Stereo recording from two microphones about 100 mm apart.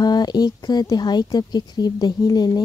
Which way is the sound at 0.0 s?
45° left (ahead or behind).